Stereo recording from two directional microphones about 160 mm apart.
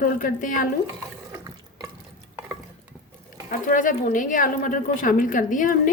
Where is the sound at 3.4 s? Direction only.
55° left (ahead or behind).